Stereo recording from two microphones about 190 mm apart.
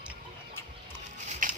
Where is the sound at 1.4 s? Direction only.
45° right (ahead or behind).